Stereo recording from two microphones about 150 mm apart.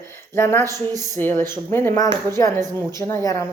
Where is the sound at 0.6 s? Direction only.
25° right (ahead or behind).